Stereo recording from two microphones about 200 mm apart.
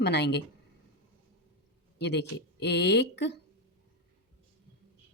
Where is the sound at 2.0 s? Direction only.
55° left (ahead or behind).